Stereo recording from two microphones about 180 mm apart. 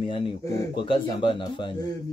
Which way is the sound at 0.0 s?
30° left (ahead or behind).